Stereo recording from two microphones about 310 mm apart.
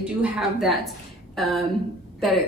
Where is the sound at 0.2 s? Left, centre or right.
Centre.